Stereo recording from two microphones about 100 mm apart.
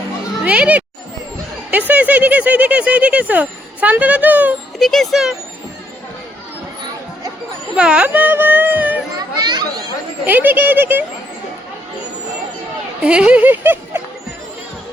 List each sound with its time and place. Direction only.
0.4 s speech: 15° right (ahead or behind)
1.9 s speech: 15° right (ahead or behind)
4.8 s speech: centre (ahead or behind)
7.8 s speech: 10° right (ahead or behind)
9.1 s speech: 45° right (ahead or behind)
10.2 s speech: 20° right (ahead or behind)
13.1 s speech: 10° right (ahead or behind)